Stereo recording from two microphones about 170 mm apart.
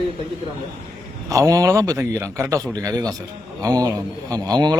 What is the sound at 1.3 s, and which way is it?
A man's voice, 20° right (ahead or behind).